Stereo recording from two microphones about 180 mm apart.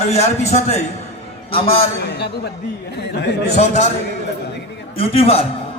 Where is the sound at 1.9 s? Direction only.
65° left (ahead or behind).